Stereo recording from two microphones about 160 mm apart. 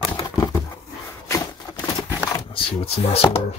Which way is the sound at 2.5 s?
35° left (ahead or behind).